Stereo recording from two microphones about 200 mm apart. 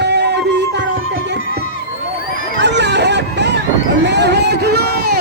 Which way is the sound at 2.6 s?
60° right (ahead or behind).